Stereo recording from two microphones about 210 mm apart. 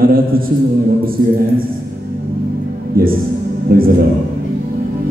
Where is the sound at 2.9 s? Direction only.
45° right (ahead or behind).